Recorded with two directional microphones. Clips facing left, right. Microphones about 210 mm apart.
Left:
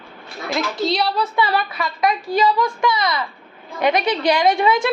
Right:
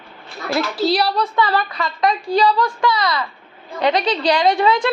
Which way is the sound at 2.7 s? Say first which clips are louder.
Right 1 dB; 25° left (ahead or behind).